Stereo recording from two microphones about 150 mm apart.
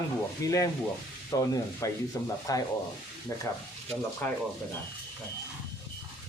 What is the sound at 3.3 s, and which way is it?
Speech, 20° left (ahead or behind).